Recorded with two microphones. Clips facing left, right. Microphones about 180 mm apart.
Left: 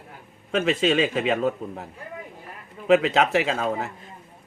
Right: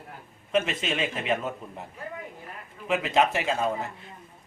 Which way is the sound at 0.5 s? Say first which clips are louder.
Left 6 dB; 70° left (ahead or behind).